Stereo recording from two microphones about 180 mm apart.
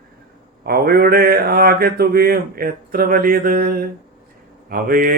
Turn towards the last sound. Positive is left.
turn(degrees=-55)  # may be behind; listen again after turning